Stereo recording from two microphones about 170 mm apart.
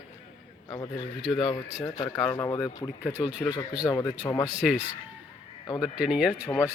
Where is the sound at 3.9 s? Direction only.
25° left (ahead or behind).